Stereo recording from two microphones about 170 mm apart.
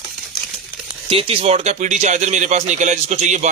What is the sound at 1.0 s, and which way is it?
A man's voice, 35° right (ahead or behind).